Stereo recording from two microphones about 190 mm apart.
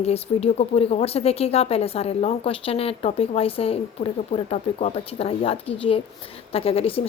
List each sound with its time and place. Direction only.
0.0 s speech: 35° left (ahead or behind)